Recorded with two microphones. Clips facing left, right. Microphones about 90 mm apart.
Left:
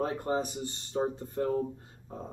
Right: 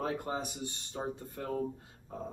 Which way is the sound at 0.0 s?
40° left (ahead or behind).